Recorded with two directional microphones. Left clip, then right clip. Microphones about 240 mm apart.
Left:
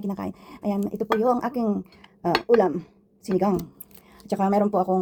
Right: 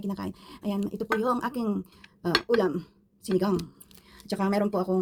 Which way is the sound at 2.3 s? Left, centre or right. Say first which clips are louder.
Left 5 dB; centre.